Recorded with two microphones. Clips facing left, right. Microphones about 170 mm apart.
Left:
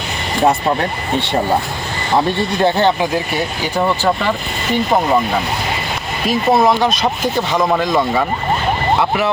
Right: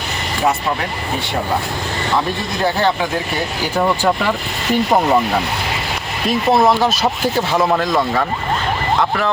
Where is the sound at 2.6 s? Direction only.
20° left (ahead or behind).